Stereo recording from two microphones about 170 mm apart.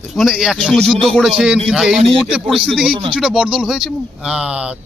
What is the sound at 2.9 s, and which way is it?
Speech, 30° right (ahead or behind).